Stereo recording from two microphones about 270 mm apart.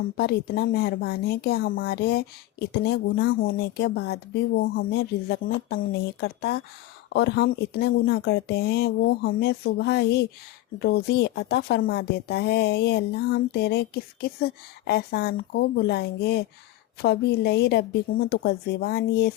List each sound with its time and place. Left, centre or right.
0.2 s speech: left